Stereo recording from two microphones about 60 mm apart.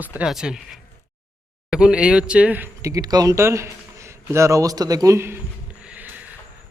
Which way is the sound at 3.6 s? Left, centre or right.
Right.